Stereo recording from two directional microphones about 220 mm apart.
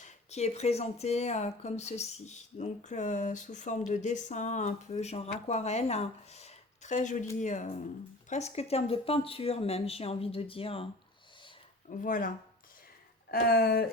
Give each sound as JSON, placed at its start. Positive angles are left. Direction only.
{"t": 0.0, "sound": "speech", "side_deg": 30}
{"t": 11.9, "sound": "speech", "side_deg": 35}